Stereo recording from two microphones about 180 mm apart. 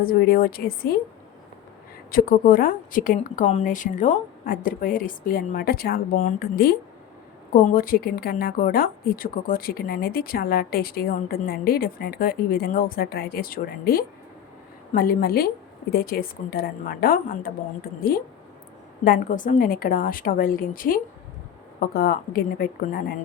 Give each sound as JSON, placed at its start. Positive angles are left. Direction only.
{"t": 0.0, "sound": "a woman's voice", "side_deg": 55}
{"t": 2.0, "sound": "a woman's voice", "side_deg": 50}
{"t": 19.0, "sound": "a woman's voice", "side_deg": 50}